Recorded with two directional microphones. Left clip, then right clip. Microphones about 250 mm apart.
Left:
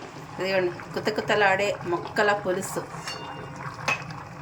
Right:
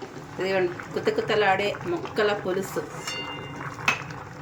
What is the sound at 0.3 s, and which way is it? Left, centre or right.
Speech, centre.